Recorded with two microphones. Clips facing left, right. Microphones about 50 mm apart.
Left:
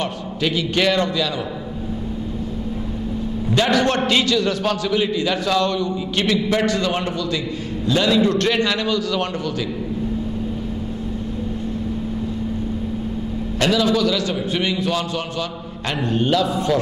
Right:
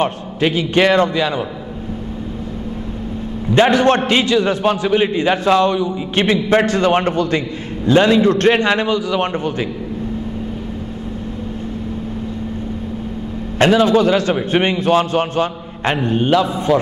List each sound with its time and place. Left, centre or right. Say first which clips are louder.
0.0 s a man's voice: right 6 dB; right
3.5 s a man's voice: right 6 dB; right
6.1 s a man's voice: right 6 dB; right
13.6 s a man's voice: right 6 dB; right